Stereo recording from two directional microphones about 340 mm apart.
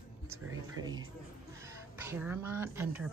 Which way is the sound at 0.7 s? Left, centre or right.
Centre.